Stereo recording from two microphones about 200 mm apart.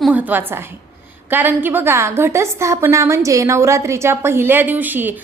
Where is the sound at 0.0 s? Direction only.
5° right (ahead or behind).